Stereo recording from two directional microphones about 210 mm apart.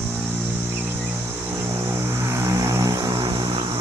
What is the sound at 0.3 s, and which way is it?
Cricket, 10° right (ahead or behind).